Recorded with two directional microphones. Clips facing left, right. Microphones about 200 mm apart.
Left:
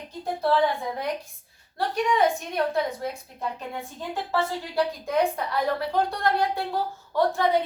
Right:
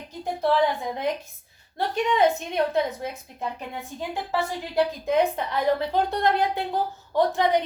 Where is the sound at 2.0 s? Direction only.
25° right (ahead or behind).